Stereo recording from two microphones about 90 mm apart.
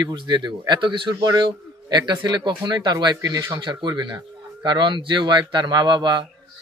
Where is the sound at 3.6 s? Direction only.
55° right (ahead or behind).